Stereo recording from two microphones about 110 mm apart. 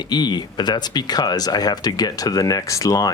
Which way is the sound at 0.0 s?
40° left (ahead or behind).